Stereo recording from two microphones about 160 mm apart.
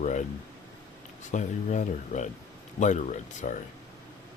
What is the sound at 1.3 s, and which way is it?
Speech, 50° left (ahead or behind).